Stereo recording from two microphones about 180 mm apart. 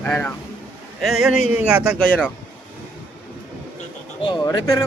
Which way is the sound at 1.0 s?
5° right (ahead or behind).